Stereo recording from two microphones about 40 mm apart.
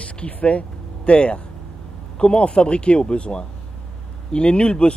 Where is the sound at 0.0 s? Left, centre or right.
Left.